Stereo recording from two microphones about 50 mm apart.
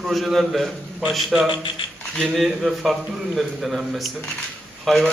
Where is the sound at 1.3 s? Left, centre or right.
Centre.